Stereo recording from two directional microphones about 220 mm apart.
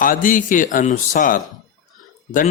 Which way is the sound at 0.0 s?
40° left (ahead or behind).